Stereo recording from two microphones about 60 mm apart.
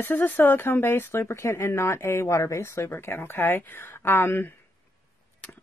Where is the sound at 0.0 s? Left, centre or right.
Left.